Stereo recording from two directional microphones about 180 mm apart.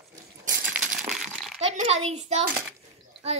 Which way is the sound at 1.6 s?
35° right (ahead or behind).